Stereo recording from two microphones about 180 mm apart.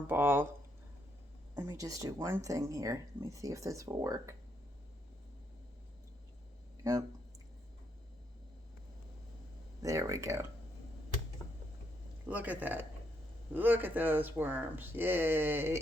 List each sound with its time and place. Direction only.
0.1 s speech: 10° right (ahead or behind)
1.5 s speech: 15° right (ahead or behind)
9.8 s speech: 15° right (ahead or behind)
12.2 s speech: 10° right (ahead or behind)